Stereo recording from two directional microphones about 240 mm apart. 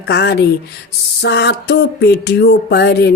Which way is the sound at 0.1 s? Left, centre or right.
Left.